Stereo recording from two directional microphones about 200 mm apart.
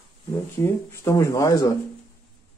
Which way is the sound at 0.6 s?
15° left (ahead or behind).